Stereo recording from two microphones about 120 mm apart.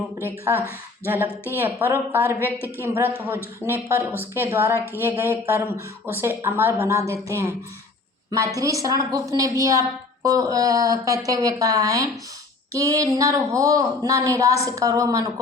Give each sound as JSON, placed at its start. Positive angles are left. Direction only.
{"t": 0.2, "sound": "a woman's voice", "side_deg": -20}
{"t": 8.5, "sound": "speech", "side_deg": -30}